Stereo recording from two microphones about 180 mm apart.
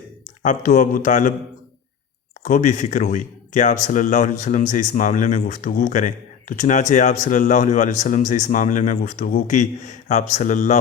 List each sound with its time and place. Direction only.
0.4 s speech: 45° left (ahead or behind)
2.4 s speech: 45° left (ahead or behind)